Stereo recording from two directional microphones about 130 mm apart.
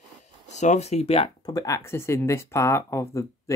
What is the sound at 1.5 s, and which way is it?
Speech, 25° left (ahead or behind).